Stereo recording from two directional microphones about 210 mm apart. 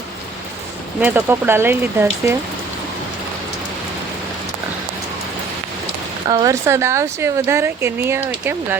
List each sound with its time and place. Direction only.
1.0 s speech: 10° right (ahead or behind)
6.2 s speech: 20° right (ahead or behind)